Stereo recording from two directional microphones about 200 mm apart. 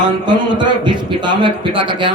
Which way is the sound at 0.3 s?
20° right (ahead or behind).